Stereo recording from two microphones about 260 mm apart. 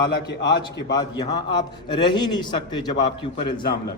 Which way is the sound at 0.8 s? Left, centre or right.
Centre.